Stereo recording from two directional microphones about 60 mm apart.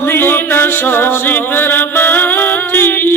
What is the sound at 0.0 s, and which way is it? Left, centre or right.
Music, left.